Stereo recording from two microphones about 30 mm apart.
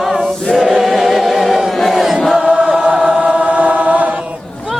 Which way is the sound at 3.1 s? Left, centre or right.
Right.